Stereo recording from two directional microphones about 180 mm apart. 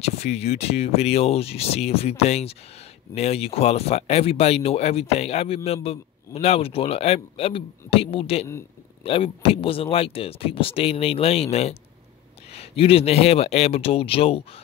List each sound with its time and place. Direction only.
0.0 s speech: 35° left (ahead or behind)